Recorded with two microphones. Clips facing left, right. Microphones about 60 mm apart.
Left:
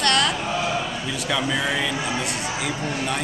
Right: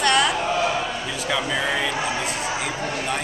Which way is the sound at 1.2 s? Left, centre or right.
Centre.